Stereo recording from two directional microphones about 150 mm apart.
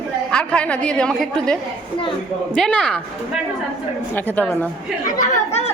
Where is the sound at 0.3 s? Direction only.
5° left (ahead or behind).